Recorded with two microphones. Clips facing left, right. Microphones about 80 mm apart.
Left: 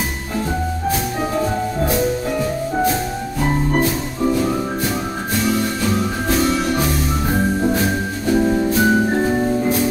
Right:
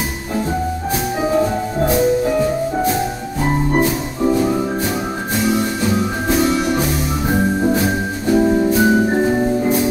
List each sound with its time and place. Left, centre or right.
1.9 s music: centre
5.8 s music: centre